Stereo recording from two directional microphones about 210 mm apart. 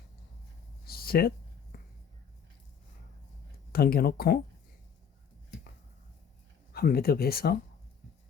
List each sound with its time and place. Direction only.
0.9 s a sound: 45° left (ahead or behind)
3.7 s speech: 45° left (ahead or behind)
6.7 s speech: 45° left (ahead or behind)